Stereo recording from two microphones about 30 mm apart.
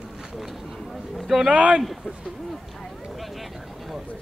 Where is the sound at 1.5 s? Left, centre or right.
Right.